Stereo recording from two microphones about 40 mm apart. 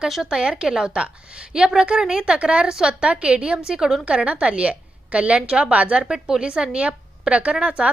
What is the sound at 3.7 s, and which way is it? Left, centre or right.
Speech, centre.